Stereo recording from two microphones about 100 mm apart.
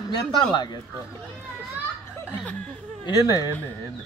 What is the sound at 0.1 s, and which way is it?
Speech, 45° left (ahead or behind).